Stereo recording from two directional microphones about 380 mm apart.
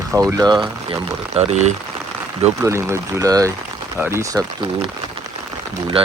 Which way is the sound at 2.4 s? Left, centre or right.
Centre.